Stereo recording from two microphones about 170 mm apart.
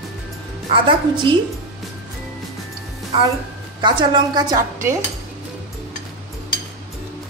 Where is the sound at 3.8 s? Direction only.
25° right (ahead or behind).